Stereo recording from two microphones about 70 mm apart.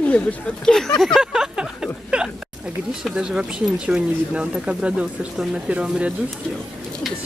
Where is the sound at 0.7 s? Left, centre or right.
Centre.